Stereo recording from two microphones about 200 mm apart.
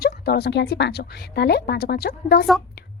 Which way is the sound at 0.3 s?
55° left (ahead or behind).